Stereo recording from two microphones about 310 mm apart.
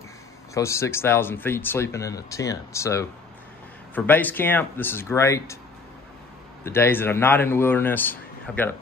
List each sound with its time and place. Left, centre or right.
0.6 s speech: centre
6.6 s speech: centre